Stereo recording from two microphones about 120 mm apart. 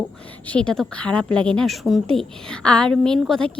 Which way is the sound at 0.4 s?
10° left (ahead or behind).